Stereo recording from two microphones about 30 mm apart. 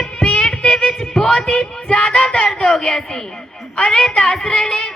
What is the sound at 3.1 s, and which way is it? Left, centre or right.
Singing, left.